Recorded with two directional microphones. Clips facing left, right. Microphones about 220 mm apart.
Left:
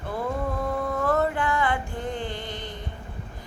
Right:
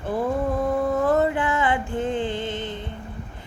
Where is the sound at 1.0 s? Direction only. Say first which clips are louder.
Right 3 dB; 20° right (ahead or behind).